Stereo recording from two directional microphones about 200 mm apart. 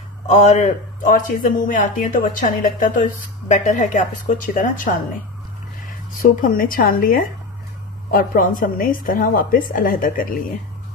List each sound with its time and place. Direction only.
0.3 s speech: 35° left (ahead or behind)
6.2 s a woman's voice: 45° left (ahead or behind)